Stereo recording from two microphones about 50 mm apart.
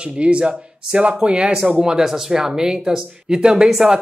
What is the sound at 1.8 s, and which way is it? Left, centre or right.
Speech, centre.